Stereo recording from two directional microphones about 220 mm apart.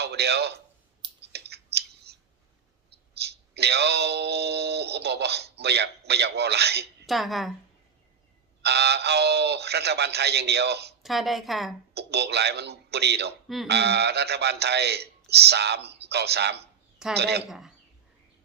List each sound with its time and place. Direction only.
0.0 s a man's voice: 50° right (ahead or behind)
1.3 s a sound: 50° right (ahead or behind)
2.9 s speech: 50° right (ahead or behind)
7.1 s a woman's voice: centre (ahead or behind)
8.6 s speech: 50° right (ahead or behind)
11.0 s a woman's voice: centre (ahead or behind)
11.9 s speech: 50° right (ahead or behind)